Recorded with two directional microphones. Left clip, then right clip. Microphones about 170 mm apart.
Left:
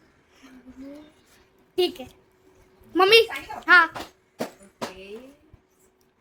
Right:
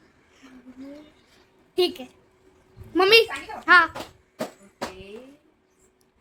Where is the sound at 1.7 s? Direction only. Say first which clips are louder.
Right 1 dB; centre (ahead or behind).